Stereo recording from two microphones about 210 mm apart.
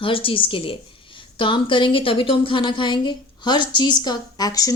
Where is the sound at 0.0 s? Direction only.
25° left (ahead or behind).